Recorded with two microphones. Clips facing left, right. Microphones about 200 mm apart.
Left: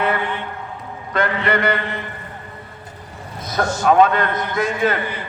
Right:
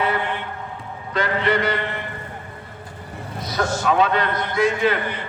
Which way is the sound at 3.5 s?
50° left (ahead or behind).